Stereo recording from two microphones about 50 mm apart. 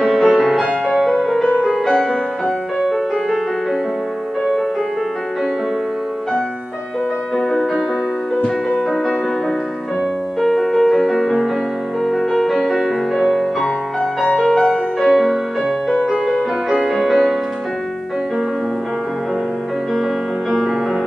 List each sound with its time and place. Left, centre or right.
0.0 s music: centre
7.3 s music: centre
8.6 s music: centre
10.4 s music: centre
14.2 s music: centre
15.0 s music: centre